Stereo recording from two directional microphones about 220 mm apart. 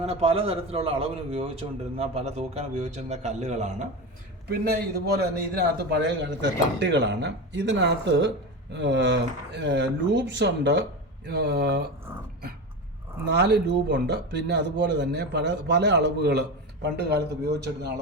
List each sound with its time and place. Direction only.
0.0 s a man's voice: 25° right (ahead or behind)
4.4 s speech: 45° right (ahead or behind)
13.2 s speech: 50° right (ahead or behind)